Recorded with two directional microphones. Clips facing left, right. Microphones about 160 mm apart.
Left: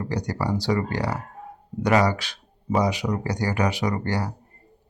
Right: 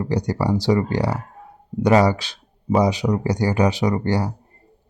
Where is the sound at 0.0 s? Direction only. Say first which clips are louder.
Right 5 dB; 25° right (ahead or behind).